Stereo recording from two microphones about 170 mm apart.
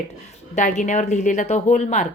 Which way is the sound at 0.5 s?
45° left (ahead or behind).